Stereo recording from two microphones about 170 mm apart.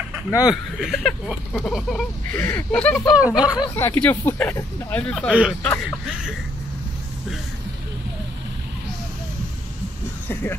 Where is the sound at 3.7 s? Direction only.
10° left (ahead or behind).